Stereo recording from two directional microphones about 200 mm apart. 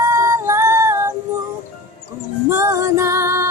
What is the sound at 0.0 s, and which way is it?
Female singing, 15° right (ahead or behind).